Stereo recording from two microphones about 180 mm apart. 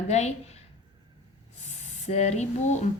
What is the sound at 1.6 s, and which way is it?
Speech, 40° left (ahead or behind).